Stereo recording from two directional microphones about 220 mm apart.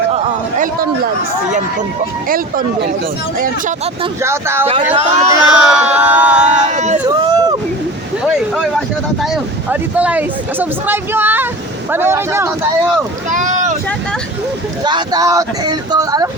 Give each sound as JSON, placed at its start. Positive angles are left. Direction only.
{"t": 0.1, "sound": "a sound", "side_deg": -35}
{"t": 2.3, "sound": "speech", "side_deg": -40}
{"t": 4.2, "sound": "speech", "side_deg": -10}
{"t": 4.6, "sound": "speech", "side_deg": -25}
{"t": 5.4, "sound": "speech", "side_deg": -5}
{"t": 6.7, "sound": "a sound", "side_deg": -30}
{"t": 7.1, "sound": "a sound", "side_deg": -15}
{"t": 9.3, "sound": "speech", "side_deg": -5}
{"t": 13.3, "sound": "boat", "side_deg": -35}
{"t": 14.8, "sound": "speech", "side_deg": -20}